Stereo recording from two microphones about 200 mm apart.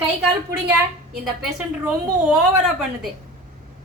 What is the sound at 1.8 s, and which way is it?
A woman's voice, 5° right (ahead or behind).